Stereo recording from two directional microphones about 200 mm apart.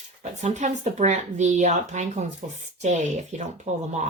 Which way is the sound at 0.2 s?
35° right (ahead or behind).